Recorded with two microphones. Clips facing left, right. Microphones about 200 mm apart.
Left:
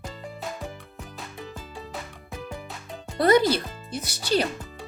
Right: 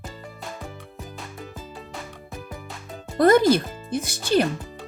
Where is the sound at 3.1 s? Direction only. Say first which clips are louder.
Right 3 dB; 50° right (ahead or behind).